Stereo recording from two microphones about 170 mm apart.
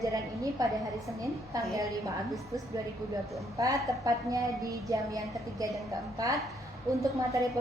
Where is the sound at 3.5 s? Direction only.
20° right (ahead or behind).